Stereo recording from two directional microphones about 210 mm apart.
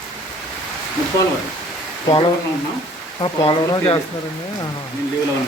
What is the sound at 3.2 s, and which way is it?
Speech, 25° left (ahead or behind).